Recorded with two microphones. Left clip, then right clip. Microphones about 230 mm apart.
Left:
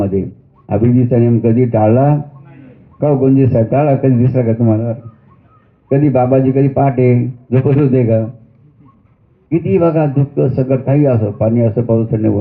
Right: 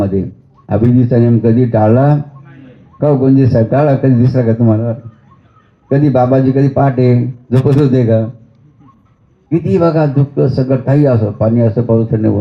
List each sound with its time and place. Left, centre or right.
0.0 s a sound: right
0.7 s a man's voice: right
9.5 s a man's voice: right